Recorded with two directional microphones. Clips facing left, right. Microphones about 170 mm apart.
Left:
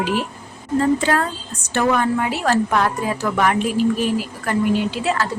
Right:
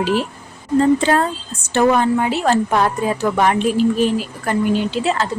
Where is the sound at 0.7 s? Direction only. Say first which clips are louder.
Right 3 dB; 25° right (ahead or behind).